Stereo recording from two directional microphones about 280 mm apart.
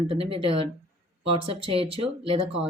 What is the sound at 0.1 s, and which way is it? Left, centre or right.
Speech, centre.